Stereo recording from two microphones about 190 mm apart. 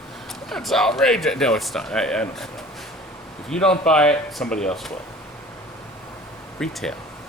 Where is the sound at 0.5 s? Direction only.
Centre (ahead or behind).